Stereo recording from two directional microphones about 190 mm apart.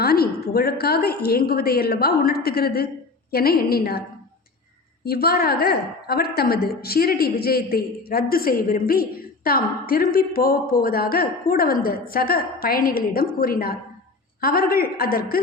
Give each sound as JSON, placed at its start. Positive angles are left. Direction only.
{"t": 0.0, "sound": "a woman's voice", "side_deg": 55}
{"t": 5.0, "sound": "a woman's voice", "side_deg": 55}